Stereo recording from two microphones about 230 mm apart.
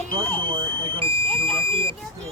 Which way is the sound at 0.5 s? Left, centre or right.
Right.